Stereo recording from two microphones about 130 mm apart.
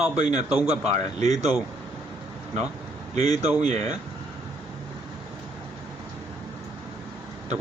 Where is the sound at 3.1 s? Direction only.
55° right (ahead or behind).